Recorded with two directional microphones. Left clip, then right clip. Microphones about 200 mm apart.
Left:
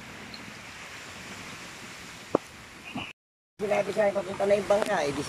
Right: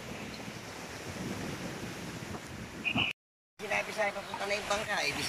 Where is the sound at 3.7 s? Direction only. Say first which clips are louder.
Left 7 dB; 45° left (ahead or behind).